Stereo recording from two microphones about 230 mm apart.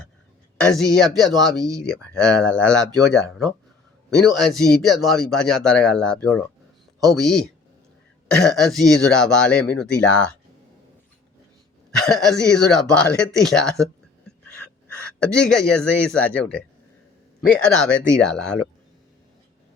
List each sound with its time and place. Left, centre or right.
0.6 s speech: centre
1.5 s speech: centre
1.8 s speech: centre
11.9 s speech: centre
15.0 s speech: centre